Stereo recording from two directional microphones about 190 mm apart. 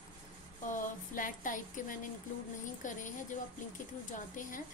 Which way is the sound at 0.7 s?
45° left (ahead or behind).